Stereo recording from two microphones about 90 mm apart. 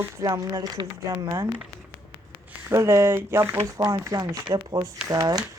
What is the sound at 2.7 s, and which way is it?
Speech, 35° right (ahead or behind).